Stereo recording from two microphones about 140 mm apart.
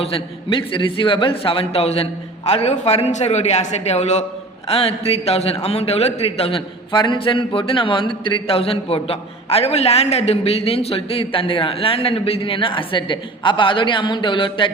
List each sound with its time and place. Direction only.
0.0 s a man's voice: 40° left (ahead or behind)